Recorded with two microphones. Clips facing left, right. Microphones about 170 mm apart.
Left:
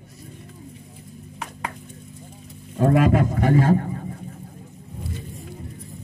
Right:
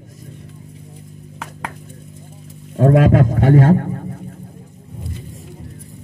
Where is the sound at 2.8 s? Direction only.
65° right (ahead or behind); by 3.5 s 90° right.